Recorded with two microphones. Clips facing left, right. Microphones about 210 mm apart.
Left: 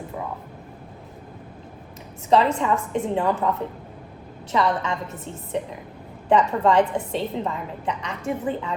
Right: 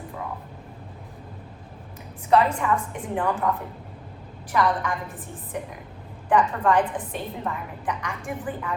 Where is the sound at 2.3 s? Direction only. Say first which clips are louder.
Left 1 dB; 25° left (ahead or behind).